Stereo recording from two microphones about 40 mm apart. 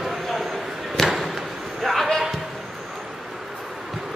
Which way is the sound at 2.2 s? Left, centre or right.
Centre.